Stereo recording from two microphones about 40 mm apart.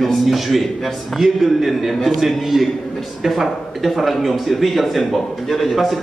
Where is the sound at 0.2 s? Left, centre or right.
Centre.